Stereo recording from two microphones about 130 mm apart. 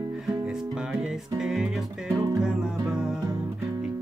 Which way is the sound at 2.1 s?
30° right (ahead or behind).